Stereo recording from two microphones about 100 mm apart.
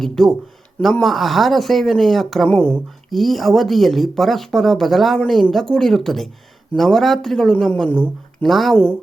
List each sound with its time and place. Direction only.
0.0 s speech: 5° left (ahead or behind)
2.5 s a woman's voice: 15° left (ahead or behind)
3.1 s a woman's voice: centre (ahead or behind)
8.4 s speech: centre (ahead or behind)
8.7 s speech: 20° left (ahead or behind)